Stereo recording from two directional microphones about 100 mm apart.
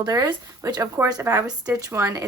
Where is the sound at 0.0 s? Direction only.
35° right (ahead or behind).